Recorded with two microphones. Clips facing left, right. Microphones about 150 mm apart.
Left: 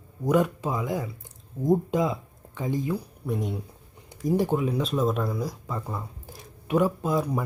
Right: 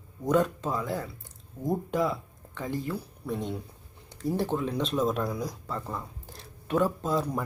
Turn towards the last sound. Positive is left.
turn(degrees=10)  # may be behind; listen again after turning